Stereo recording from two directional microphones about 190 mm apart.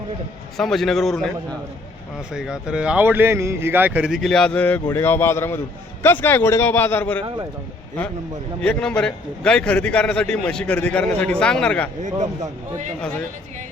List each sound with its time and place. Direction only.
0.5 s speech: centre (ahead or behind)
2.3 s a man's voice: 5° right (ahead or behind)
7.2 s speech: 25° right (ahead or behind)
8.6 s speech: 5° left (ahead or behind)